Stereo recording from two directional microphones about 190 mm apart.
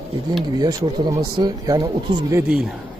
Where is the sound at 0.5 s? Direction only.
20° right (ahead or behind).